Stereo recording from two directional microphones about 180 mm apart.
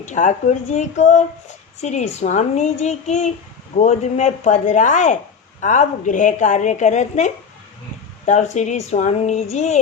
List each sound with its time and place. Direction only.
0.0 s a child's voice: 45° left (ahead or behind)